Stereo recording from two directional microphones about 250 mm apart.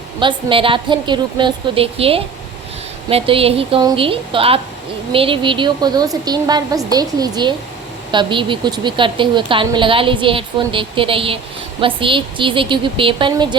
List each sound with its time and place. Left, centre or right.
0.2 s a woman's voice: centre